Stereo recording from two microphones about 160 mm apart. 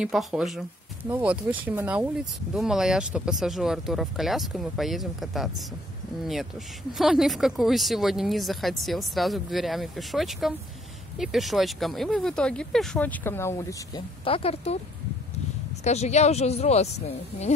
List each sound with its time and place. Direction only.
0.0 s speech: 5° right (ahead or behind)
6.9 s speech: centre (ahead or behind); by 13.7 s 15° left (ahead or behind)
13.9 s speech: 35° left (ahead or behind)
15.8 s speech: 45° left (ahead or behind)